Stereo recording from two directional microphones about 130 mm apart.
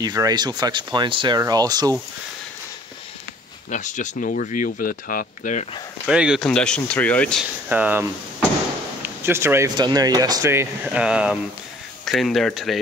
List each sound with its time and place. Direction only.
0.0 s speech: 30° right (ahead or behind)
3.7 s speech: 70° left (ahead or behind)
6.0 s speech: 5° right (ahead or behind)
6.4 s speech: 5° left (ahead or behind)
7.7 s speech: 15° right (ahead or behind)
9.2 s speech: 20° right (ahead or behind)
9.8 s speech: 30° right (ahead or behind)
10.5 s speech: 15° right (ahead or behind)